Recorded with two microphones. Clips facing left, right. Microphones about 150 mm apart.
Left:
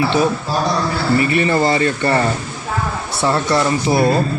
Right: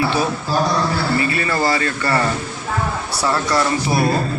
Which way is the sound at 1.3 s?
25° left (ahead or behind).